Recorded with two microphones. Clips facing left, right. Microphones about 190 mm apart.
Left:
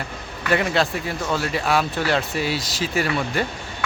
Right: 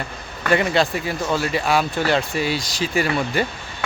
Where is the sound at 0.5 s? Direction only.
Centre (ahead or behind).